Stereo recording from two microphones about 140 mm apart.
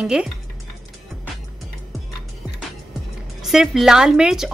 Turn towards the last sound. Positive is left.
turn(degrees=-5)  # may be behind; listen again after turning